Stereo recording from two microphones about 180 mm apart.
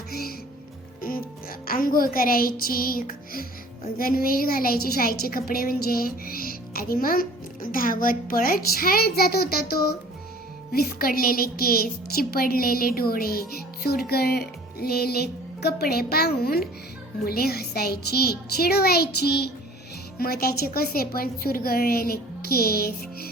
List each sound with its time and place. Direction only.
0.1 s music: 55° left (ahead or behind)
3.9 s a woman's voice: 55° left (ahead or behind)